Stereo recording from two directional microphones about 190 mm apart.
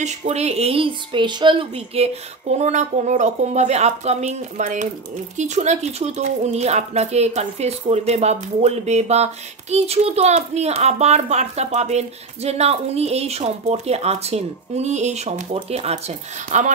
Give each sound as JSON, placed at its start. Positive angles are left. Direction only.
{"t": 0.0, "sound": "speech", "side_deg": -35}
{"t": 2.5, "sound": "speech", "side_deg": -40}